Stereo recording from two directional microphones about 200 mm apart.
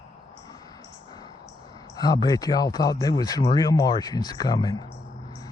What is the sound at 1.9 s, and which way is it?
Speech, 20° left (ahead or behind).